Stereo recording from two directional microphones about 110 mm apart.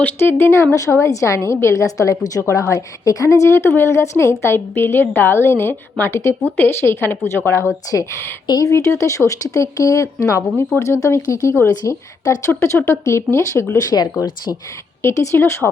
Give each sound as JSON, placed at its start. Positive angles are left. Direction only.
{"t": 0.0, "sound": "a woman's voice", "side_deg": 20}
{"t": 8.4, "sound": "speech", "side_deg": 40}
{"t": 8.7, "sound": "a woman's voice", "side_deg": 25}
{"t": 15.0, "sound": "a woman's voice", "side_deg": 25}